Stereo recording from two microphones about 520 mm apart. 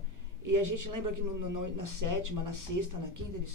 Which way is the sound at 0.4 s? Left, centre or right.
Right.